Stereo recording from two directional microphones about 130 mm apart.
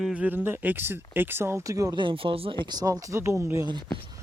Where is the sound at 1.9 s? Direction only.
40° right (ahead or behind).